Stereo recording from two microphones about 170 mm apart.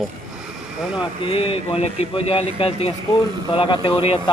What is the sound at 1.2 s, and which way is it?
Speech, 30° left (ahead or behind).